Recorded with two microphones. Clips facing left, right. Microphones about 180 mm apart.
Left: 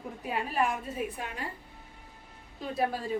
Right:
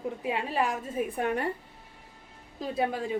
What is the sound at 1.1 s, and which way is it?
Speech, 60° right (ahead or behind).